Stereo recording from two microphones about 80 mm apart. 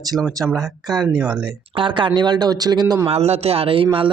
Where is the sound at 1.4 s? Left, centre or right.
Right.